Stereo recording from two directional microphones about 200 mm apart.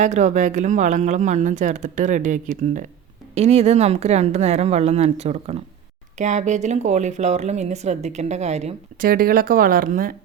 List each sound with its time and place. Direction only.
0.0 s speech: 35° right (ahead or behind)
9.0 s speech: 45° right (ahead or behind)